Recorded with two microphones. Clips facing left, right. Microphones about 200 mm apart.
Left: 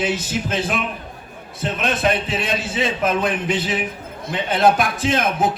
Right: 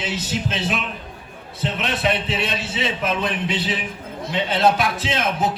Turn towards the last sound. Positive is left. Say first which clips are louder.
# left 3 dB
turn(degrees=50)  # may be behind; listen again after turning